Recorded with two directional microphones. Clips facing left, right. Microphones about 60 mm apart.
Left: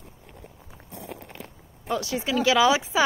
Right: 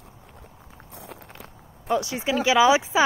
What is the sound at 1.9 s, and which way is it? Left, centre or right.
Speech, right.